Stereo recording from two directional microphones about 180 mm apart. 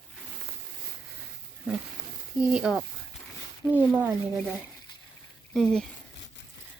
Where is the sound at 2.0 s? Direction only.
70° right (ahead or behind).